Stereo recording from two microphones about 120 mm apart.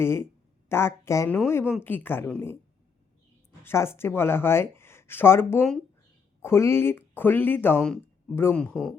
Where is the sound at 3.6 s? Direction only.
20° left (ahead or behind).